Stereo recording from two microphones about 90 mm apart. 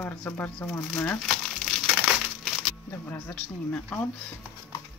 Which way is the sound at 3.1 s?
15° left (ahead or behind).